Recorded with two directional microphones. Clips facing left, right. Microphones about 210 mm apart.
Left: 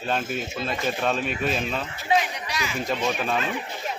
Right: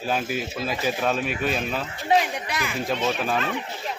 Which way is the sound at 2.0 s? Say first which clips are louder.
Right 2 dB; 50° right (ahead or behind).